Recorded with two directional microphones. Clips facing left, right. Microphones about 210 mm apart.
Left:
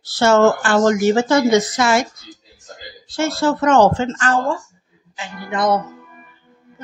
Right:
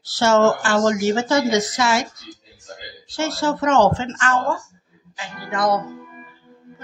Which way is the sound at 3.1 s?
55° left (ahead or behind).